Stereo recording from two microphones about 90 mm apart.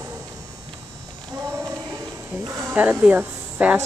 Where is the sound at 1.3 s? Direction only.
35° right (ahead or behind).